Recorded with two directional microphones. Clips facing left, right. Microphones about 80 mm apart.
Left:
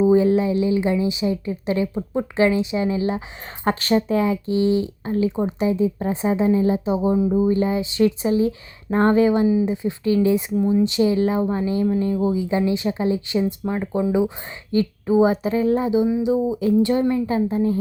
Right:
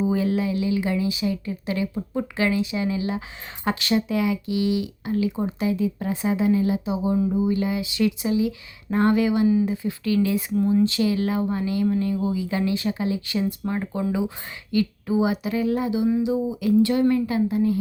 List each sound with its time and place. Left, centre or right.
0.0 s a woman's voice: left
14.1 s a woman's voice: left